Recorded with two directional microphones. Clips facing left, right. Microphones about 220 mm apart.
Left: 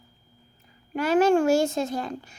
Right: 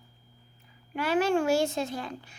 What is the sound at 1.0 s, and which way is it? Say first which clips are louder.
A woman's voice: left 6 dB; 45° left (ahead or behind).